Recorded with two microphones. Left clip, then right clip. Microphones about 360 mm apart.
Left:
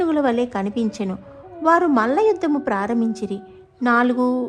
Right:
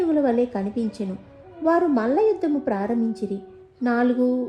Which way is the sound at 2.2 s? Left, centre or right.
Centre.